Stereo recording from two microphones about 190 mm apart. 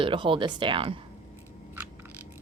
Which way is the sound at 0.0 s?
25° right (ahead or behind).